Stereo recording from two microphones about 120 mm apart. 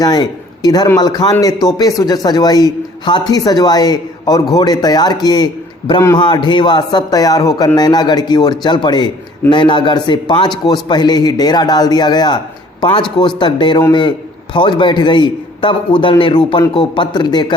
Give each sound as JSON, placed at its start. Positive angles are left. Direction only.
{"t": 0.0, "sound": "speech", "side_deg": 35}